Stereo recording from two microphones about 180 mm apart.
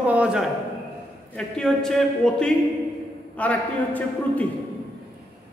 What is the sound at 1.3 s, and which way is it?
A man's voice, 5° left (ahead or behind).